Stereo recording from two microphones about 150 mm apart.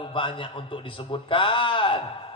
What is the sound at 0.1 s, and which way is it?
A man's voice, 35° left (ahead or behind).